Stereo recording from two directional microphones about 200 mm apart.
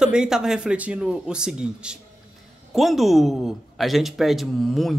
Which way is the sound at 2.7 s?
Centre (ahead or behind).